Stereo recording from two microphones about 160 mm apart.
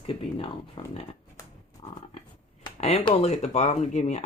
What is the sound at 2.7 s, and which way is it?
Speech, 40° left (ahead or behind).